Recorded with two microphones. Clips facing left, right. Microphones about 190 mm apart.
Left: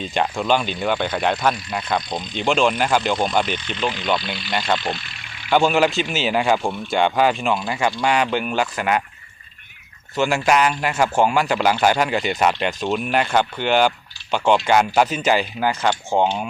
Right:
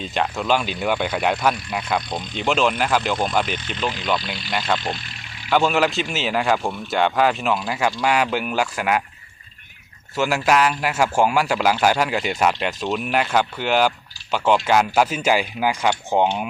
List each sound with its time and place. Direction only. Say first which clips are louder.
0.0 s a man's voice: left 2 dB; centre (ahead or behind)
4.9 s vehicle: even; 40° right (ahead or behind)
5.5 s a man's voice: left 2 dB; centre (ahead or behind)
10.2 s a man's voice: left 1 dB; 5° right (ahead or behind)